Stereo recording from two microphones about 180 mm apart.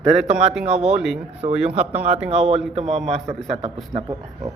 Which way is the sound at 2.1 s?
35° right (ahead or behind).